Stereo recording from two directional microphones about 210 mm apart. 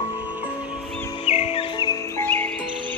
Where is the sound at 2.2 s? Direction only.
10° left (ahead or behind).